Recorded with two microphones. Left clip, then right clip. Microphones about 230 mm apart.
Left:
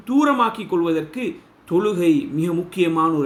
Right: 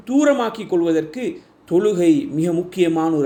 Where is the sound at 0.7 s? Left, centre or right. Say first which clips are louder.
Right 2 dB; centre.